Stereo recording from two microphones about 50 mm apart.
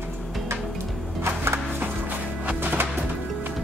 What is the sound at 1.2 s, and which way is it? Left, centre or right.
Music, right.